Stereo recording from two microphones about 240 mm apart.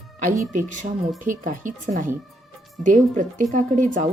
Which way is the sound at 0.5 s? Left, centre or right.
Right.